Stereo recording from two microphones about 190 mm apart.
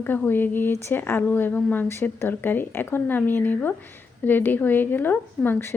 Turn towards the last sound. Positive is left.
turn(degrees=10)  # may be behind; listen again after turning